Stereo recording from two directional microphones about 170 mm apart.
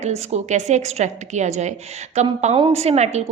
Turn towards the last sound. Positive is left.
turn(degrees=-40)  # may be behind; listen again after turning